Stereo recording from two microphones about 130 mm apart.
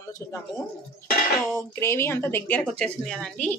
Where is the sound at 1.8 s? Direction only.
20° left (ahead or behind).